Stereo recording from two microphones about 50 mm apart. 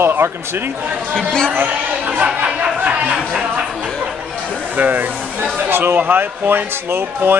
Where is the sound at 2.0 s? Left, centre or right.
Right.